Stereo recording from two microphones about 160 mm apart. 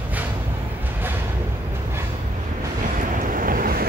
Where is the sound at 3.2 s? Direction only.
60° right (ahead or behind).